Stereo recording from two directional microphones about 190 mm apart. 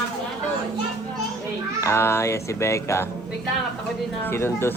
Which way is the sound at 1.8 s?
15° left (ahead or behind).